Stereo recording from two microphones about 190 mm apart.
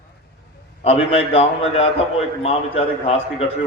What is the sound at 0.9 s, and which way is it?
A man's voice, 30° left (ahead or behind).